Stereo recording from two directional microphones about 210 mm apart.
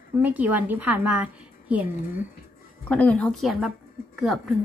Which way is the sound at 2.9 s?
5° left (ahead or behind).